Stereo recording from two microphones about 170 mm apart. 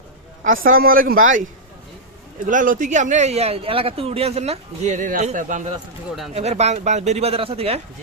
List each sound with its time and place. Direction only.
0.4 s a man's voice: 55° right (ahead or behind)
2.5 s speech: 50° right (ahead or behind)